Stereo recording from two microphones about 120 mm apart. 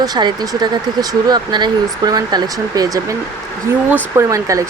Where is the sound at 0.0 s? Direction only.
35° right (ahead or behind).